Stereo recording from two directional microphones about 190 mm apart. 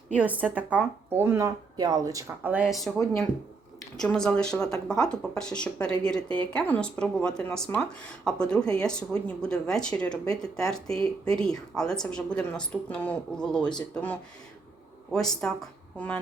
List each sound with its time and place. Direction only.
0.2 s speech: 10° right (ahead or behind)
4.0 s speech: 5° left (ahead or behind)
6.2 s speech: 25° right (ahead or behind)
6.5 s speech: 5° left (ahead or behind)